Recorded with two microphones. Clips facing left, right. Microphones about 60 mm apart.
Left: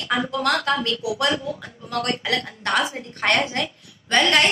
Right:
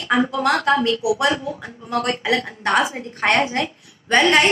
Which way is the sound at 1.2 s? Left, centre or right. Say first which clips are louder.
Right 3 dB; right.